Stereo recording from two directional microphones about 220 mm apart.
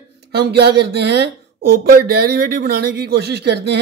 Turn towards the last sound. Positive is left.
turn(degrees=-50)  # may be behind; listen again after turning